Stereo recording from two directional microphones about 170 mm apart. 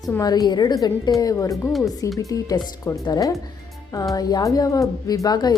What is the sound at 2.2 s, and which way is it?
Speech, 20° left (ahead or behind).